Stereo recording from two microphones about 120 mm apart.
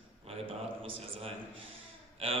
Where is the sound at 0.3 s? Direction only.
55° right (ahead or behind).